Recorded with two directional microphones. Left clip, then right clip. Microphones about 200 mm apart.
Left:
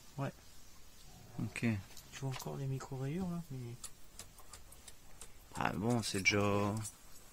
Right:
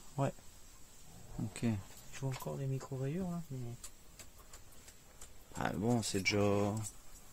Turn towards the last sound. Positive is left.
turn(degrees=-5)  # may be behind; listen again after turning